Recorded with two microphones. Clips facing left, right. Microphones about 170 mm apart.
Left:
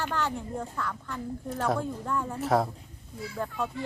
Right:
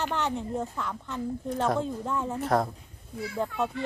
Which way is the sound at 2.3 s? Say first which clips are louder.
Left 1 dB; 5° left (ahead or behind).